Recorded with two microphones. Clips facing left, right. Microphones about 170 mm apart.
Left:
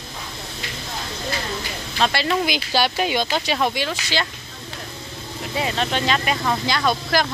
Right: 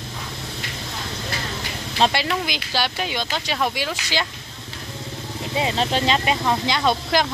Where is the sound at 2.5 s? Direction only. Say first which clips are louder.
Left 4 dB; 10° left (ahead or behind); by 4.2 s 10° right (ahead or behind).